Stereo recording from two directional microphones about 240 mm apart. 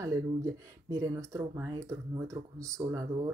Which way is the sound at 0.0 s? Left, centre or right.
Centre.